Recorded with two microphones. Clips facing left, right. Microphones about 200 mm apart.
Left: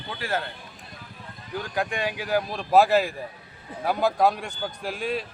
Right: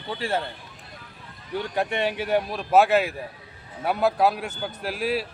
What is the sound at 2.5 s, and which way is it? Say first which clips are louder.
A man's voice: left 1 dB; 5° right (ahead or behind).